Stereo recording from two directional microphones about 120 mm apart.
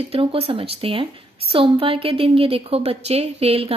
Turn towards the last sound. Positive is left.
turn(degrees=-55)  # may be behind; listen again after turning